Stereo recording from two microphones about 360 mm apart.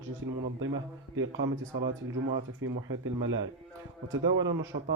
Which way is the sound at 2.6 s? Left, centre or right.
Right.